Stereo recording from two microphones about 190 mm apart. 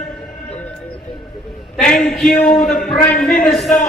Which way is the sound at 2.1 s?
5° left (ahead or behind).